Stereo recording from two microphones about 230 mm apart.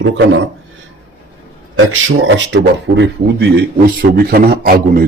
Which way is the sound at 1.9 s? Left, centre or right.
Right.